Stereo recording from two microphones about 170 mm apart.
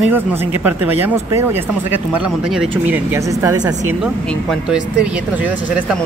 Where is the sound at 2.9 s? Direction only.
15° right (ahead or behind).